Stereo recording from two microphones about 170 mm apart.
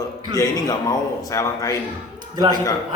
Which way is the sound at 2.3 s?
25° right (ahead or behind).